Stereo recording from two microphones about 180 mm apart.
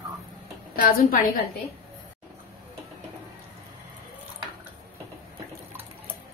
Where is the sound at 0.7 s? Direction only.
55° left (ahead or behind).